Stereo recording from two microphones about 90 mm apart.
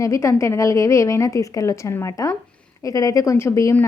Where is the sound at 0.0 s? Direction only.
35° left (ahead or behind).